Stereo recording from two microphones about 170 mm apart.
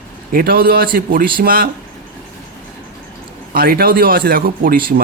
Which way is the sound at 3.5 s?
60° right (ahead or behind).